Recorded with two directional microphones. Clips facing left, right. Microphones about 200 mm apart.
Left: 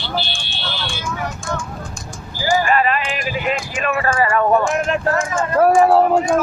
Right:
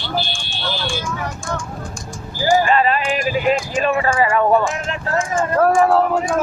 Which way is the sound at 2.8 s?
35° right (ahead or behind).